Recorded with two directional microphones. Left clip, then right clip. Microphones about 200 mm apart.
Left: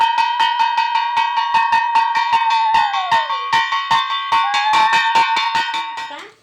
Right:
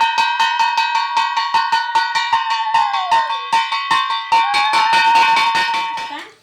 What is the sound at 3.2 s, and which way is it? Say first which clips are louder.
Music: even; 30° right (ahead or behind).